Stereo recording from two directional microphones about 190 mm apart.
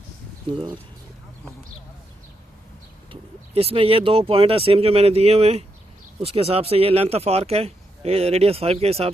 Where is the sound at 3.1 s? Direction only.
30° right (ahead or behind).